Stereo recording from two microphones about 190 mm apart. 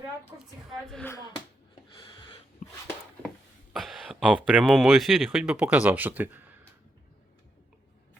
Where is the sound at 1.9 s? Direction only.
25° left (ahead or behind).